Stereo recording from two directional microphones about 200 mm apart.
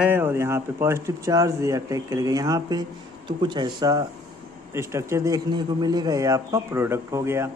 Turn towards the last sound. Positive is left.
turn(degrees=-15)  # may be behind; listen again after turning